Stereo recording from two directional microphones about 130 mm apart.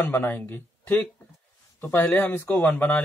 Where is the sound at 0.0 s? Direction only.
15° left (ahead or behind).